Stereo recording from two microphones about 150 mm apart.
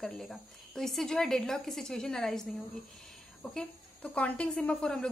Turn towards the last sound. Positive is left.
turn(degrees=5)  # may be behind; listen again after turning